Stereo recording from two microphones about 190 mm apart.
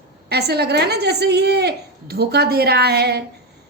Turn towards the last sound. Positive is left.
turn(degrees=-60)  # may be behind; listen again after turning